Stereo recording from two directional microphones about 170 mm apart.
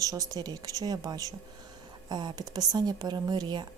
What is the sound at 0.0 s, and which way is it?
Speech, 20° right (ahead or behind).